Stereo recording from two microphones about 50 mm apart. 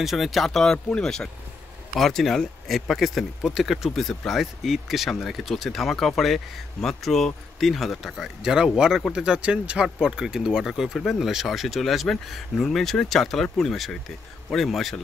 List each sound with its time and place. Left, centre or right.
0.0 s speech: centre
1.0 s speech: centre
8.7 s speech: centre